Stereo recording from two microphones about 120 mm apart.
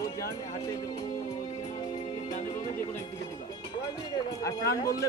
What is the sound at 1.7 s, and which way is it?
Music, 40° left (ahead or behind).